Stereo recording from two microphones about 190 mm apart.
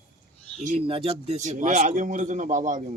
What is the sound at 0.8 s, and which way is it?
A man's voice, 30° right (ahead or behind).